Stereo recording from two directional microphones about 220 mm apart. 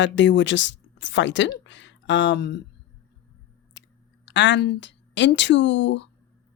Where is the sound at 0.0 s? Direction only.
55° left (ahead or behind).